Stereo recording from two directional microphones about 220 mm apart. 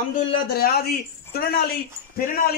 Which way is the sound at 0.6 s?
45° left (ahead or behind).